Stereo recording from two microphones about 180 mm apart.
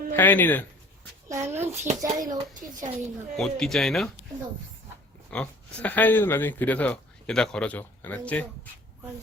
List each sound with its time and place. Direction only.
0.2 s speech: 10° left (ahead or behind)
1.3 s a sound: 15° right (ahead or behind)
1.6 s a child's voice: 15° right (ahead or behind)
2.3 s a child's voice: 45° right (ahead or behind)
3.3 s speech: centre (ahead or behind)
5.3 s speech: 5° left (ahead or behind)